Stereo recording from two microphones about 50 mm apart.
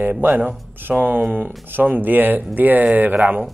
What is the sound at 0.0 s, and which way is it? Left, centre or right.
Speech, right.